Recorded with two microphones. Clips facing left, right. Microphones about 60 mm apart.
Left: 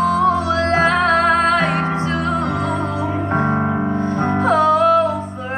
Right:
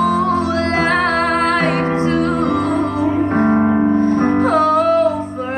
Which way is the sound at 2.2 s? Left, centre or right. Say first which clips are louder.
Right 4 dB; right.